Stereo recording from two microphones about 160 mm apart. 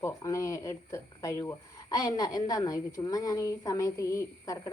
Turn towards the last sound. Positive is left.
turn(degrees=20)  # may be behind; listen again after turning